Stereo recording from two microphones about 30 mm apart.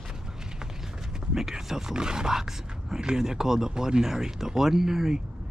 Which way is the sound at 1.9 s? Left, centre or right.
Right.